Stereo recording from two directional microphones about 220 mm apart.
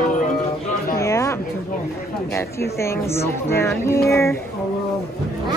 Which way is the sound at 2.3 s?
10° left (ahead or behind).